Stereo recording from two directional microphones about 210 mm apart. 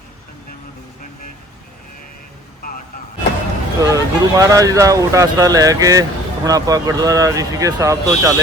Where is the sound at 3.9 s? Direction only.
15° right (ahead or behind).